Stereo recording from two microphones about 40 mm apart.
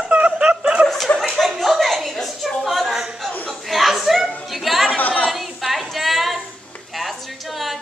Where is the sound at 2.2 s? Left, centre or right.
Centre.